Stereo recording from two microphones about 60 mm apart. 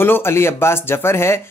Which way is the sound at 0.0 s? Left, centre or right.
Left.